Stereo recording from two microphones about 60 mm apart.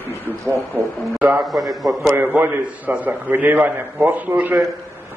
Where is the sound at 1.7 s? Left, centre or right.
Centre.